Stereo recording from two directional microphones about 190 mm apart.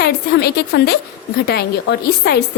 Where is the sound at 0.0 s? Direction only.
60° left (ahead or behind).